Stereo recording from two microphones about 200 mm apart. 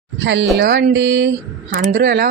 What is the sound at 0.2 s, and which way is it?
A woman's voice, 65° right (ahead or behind).